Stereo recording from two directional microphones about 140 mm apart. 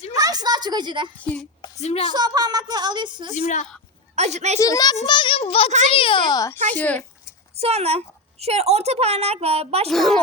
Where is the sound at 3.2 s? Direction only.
60° left (ahead or behind).